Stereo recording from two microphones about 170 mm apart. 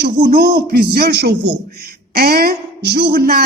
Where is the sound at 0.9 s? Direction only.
70° right (ahead or behind).